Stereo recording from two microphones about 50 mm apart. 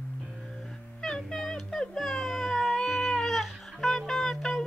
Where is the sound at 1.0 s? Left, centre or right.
Centre.